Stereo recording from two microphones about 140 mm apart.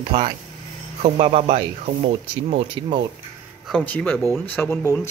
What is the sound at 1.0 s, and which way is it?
Speech, 50° right (ahead or behind).